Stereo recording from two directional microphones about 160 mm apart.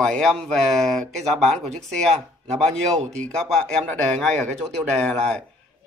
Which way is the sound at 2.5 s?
45° right (ahead or behind).